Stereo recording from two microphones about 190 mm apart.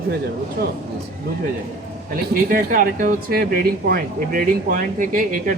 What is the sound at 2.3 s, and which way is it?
Speech, 50° right (ahead or behind).